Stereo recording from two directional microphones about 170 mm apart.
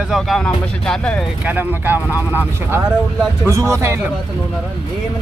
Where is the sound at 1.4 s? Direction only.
10° right (ahead or behind).